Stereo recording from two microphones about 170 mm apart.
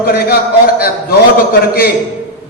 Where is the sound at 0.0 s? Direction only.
70° left (ahead or behind).